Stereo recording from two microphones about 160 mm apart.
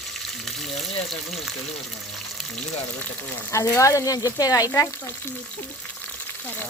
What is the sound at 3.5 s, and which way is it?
Speech, 20° left (ahead or behind).